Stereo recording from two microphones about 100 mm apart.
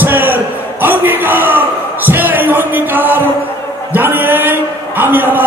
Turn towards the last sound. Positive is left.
turn(degrees=-20)  # may be behind; listen again after turning